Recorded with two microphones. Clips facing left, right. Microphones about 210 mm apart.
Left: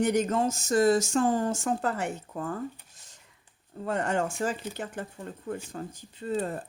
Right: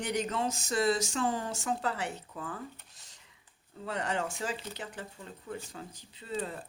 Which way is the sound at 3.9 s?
50° left (ahead or behind).